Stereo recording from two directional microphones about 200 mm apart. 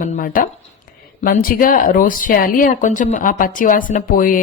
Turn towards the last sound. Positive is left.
turn(degrees=45)  # may be behind; listen again after turning